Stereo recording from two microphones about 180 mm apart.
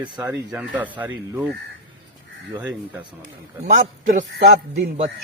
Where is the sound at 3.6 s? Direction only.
45° right (ahead or behind).